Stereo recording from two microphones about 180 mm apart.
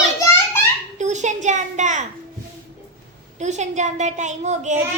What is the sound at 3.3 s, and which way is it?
A child's voice, 40° right (ahead or behind).